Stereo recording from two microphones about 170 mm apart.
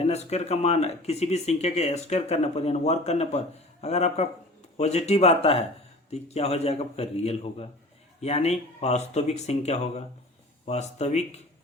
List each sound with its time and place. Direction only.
0.0 s speech: 40° left (ahead or behind)